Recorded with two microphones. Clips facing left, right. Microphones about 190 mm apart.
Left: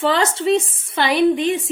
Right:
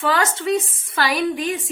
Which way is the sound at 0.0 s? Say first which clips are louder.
Left 3 dB; 30° left (ahead or behind).